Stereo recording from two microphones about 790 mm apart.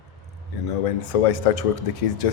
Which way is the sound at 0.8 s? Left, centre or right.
Left.